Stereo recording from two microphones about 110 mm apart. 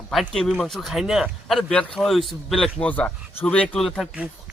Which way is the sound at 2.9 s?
15° left (ahead or behind).